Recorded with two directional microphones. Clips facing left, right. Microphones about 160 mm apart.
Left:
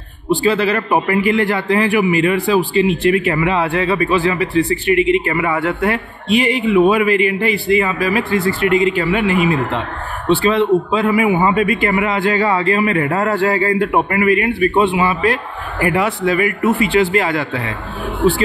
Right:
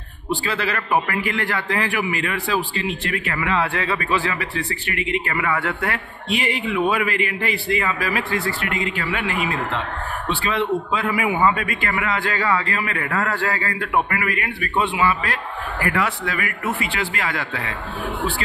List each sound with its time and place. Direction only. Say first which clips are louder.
0.3 s a man's voice: left 9 dB; 20° left (ahead or behind)